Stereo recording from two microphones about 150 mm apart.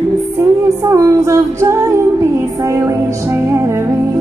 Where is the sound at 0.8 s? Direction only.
20° right (ahead or behind).